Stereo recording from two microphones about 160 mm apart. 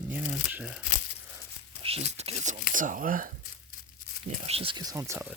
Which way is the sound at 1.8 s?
40° right (ahead or behind).